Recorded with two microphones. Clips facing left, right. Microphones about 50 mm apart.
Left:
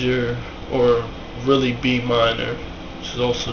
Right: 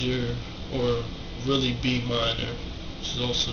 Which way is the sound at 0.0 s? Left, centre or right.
Left.